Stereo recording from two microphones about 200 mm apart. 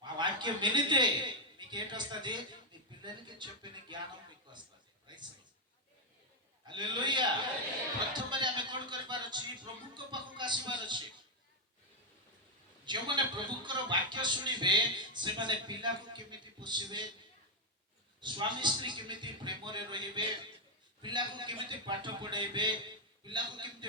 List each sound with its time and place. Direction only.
0.0 s a man's voice: 20° right (ahead or behind)
5.1 s a sound: 20° right (ahead or behind)
6.7 s speech: 20° right (ahead or behind)
12.8 s speech: 25° right (ahead or behind)
18.2 s speech: 25° right (ahead or behind)